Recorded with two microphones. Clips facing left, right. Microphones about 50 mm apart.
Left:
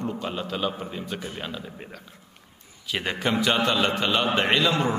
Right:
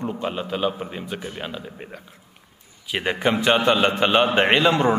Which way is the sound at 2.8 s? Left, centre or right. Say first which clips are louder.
Right 4 dB; centre.